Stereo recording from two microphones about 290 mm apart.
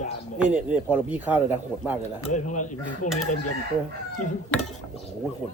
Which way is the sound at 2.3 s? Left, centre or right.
Left.